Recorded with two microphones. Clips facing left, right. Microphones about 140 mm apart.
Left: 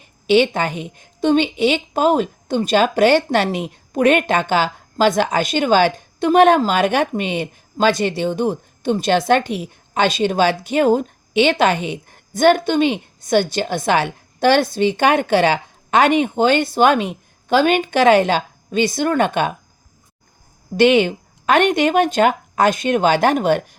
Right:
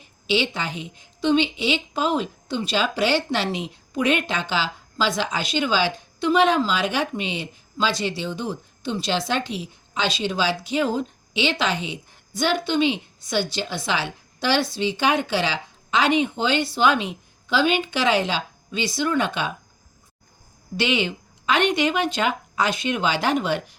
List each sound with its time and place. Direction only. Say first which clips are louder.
0.3 s a woman's voice: left 9 dB; 55° left (ahead or behind)
20.7 s a woman's voice: left 10 dB; 50° left (ahead or behind)